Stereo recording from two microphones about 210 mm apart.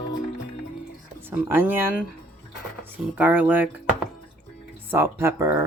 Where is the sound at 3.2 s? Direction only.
5° right (ahead or behind).